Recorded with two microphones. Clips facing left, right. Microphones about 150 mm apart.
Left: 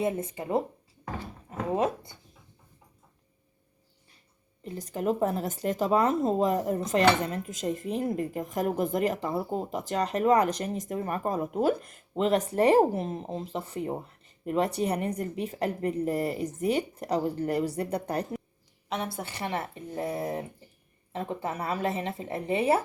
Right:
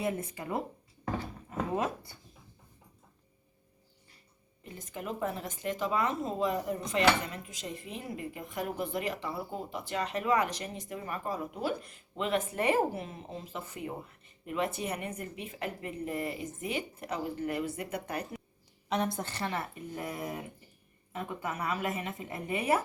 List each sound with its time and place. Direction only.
0.0 s a woman's voice: 25° left (ahead or behind)
4.6 s a woman's voice: 35° left (ahead or behind)
18.9 s a woman's voice: 5° left (ahead or behind); by 22.8 s 25° left (ahead or behind)